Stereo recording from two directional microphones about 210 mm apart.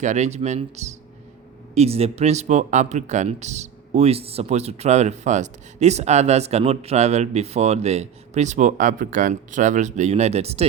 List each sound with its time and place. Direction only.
0.0 s speech: 35° right (ahead or behind)